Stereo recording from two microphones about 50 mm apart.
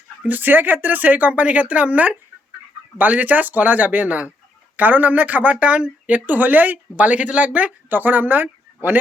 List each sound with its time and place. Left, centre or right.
0.3 s speech: right
7.9 s speech: right